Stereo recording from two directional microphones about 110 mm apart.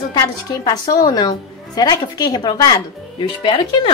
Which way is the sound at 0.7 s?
35° left (ahead or behind).